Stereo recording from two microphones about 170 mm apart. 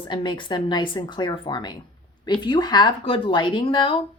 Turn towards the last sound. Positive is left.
turn(degrees=30)  # may be behind; listen again after turning